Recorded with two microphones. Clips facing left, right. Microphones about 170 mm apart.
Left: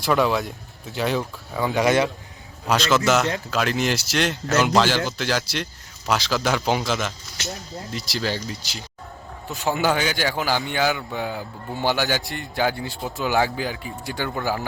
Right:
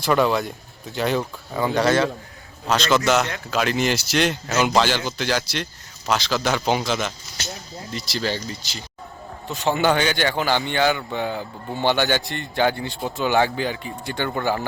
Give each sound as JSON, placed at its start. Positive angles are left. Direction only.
{"t": 0.0, "sound": "a man's voice", "side_deg": 0}
{"t": 1.8, "sound": "a man's voice", "side_deg": 15}
{"t": 2.6, "sound": "a man's voice", "side_deg": 0}